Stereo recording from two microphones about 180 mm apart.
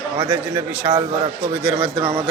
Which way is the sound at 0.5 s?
20° right (ahead or behind).